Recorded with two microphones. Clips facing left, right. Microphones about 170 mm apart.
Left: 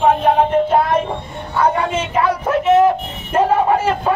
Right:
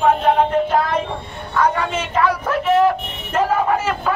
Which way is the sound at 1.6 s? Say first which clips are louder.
Left 2 dB; 30° left (ahead or behind).